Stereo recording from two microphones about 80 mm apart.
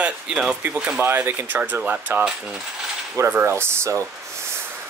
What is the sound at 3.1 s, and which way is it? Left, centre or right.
Speech, right.